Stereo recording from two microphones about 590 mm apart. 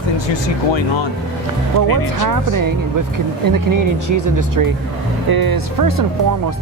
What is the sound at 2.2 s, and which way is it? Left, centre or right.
Speech, right.